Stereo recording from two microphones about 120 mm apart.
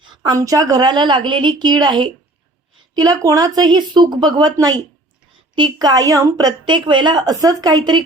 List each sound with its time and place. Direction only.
0.2 s a woman's voice: 30° right (ahead or behind)